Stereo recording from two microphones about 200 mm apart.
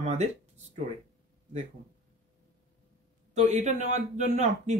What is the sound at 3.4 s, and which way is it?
Speech, 35° right (ahead or behind).